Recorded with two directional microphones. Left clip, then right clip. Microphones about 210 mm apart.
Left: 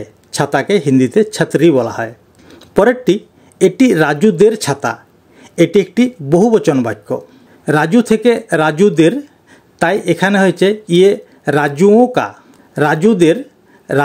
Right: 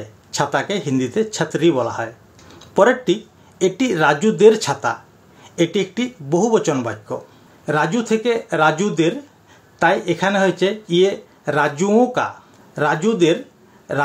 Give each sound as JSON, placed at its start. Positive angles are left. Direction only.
{"t": 0.3, "sound": "speech", "side_deg": 45}